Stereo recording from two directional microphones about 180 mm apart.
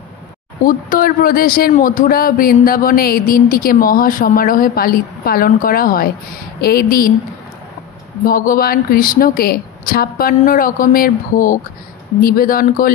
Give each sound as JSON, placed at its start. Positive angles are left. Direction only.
{"t": 0.7, "sound": "speech", "side_deg": 50}
{"t": 8.3, "sound": "speech", "side_deg": 50}